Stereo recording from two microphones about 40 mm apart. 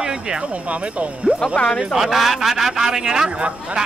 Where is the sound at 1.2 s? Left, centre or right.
Right.